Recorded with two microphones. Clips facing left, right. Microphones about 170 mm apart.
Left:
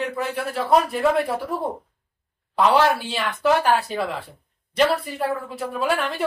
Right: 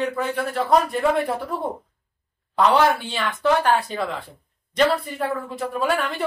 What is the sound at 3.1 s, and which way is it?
Speech, 5° left (ahead or behind).